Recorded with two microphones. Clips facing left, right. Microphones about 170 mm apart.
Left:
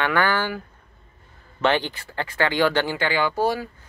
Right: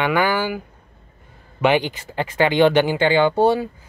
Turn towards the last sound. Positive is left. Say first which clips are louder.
# right 6 dB
turn(degrees=-25)  # may be behind; listen again after turning